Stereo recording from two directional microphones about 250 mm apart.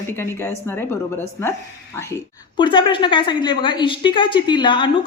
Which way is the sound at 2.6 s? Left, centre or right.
Centre.